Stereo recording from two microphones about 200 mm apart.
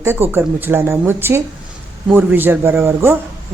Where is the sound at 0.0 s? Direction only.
10° right (ahead or behind).